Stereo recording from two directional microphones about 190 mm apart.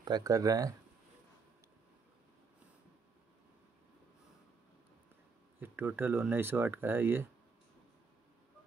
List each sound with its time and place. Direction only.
0.0 s speech: 20° right (ahead or behind)
5.6 s speech: 10° right (ahead or behind)